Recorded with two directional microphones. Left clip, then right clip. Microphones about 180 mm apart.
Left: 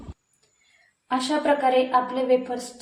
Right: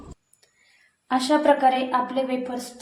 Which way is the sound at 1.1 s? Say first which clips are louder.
Right 3 dB; 35° right (ahead or behind).